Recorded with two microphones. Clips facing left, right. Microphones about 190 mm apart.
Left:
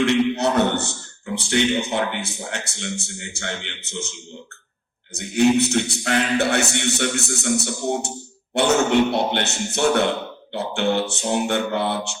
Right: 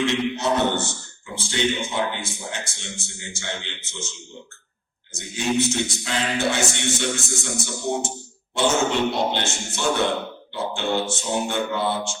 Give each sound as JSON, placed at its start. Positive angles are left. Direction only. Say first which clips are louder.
{"t": 0.0, "sound": "a man's voice", "louder": "left 4 dB", "side_deg": 65}
{"t": 5.1, "sound": "a man's voice", "louder": "left 7 dB", "side_deg": 65}